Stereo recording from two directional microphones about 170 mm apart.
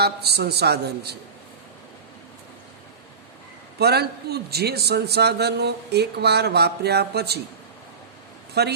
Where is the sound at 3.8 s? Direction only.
70° right (ahead or behind).